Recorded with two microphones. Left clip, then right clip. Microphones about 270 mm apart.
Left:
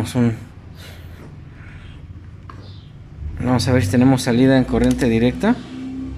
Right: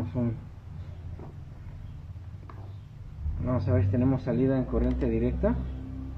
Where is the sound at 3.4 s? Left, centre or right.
Left.